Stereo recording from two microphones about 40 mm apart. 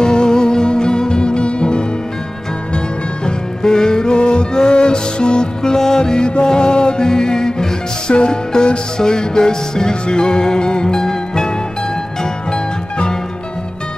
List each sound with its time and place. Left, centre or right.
0.0 s music: centre
3.3 s music: centre